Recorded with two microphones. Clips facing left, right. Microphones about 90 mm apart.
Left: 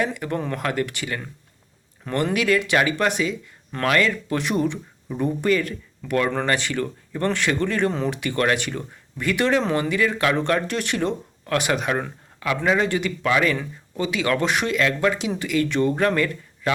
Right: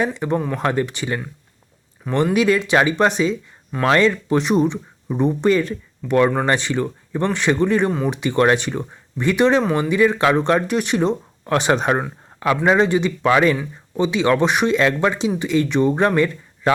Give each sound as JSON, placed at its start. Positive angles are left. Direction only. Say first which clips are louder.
{"t": 0.0, "sound": "speech", "louder": "right 4 dB", "side_deg": -20}
{"t": 2.3, "sound": "speech", "louder": "right 3 dB", "side_deg": -20}